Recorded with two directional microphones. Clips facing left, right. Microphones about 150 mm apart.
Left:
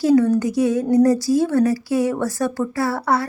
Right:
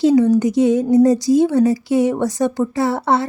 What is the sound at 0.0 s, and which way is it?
A woman's voice, 20° right (ahead or behind).